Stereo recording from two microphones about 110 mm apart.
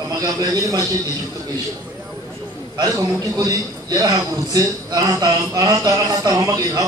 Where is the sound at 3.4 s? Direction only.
35° right (ahead or behind).